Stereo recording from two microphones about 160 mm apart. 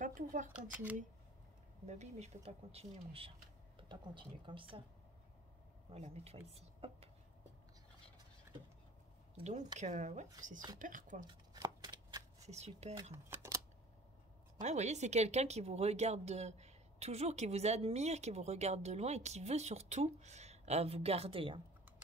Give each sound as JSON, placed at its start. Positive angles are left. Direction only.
{"t": 0.0, "sound": "speech", "side_deg": -55}
{"t": 0.5, "sound": "speech", "side_deg": -10}
{"t": 1.9, "sound": "speech", "side_deg": -45}
{"t": 5.9, "sound": "speech", "side_deg": -40}
{"t": 9.4, "sound": "speech", "side_deg": -45}
{"t": 11.2, "sound": "shuffling cards", "side_deg": -25}
{"t": 12.4, "sound": "speech", "side_deg": -45}
{"t": 13.1, "sound": "speech", "side_deg": -15}
{"t": 14.6, "sound": "speech", "side_deg": -45}